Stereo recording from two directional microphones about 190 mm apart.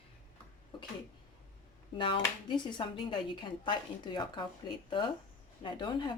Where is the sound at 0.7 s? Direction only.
25° left (ahead or behind).